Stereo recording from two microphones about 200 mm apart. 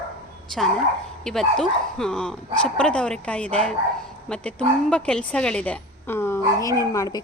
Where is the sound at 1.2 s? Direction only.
Centre (ahead or behind).